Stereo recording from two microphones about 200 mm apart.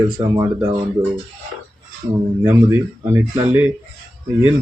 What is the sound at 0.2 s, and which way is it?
Speech, 15° right (ahead or behind).